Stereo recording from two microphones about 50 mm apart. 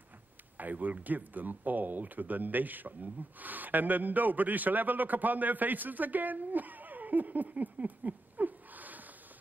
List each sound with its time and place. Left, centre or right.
0.6 s speech: right